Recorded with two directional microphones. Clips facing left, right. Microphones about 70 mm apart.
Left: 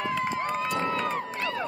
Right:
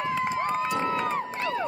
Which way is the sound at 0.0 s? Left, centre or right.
Right.